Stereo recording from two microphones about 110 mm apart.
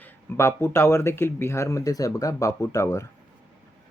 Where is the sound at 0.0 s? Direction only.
20° left (ahead or behind).